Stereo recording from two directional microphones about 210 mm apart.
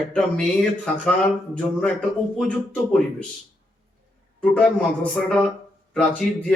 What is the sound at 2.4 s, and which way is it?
Speech, 5° left (ahead or behind).